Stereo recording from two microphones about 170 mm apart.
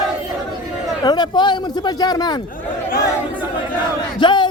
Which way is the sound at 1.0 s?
25° left (ahead or behind).